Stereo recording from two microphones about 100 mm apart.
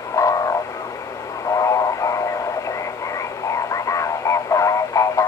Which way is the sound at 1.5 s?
35° left (ahead or behind).